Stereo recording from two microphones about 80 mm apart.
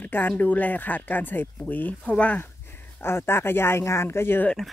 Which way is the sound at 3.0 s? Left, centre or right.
Left.